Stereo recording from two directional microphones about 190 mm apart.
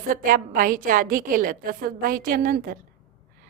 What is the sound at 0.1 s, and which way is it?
A woman's voice, 45° right (ahead or behind).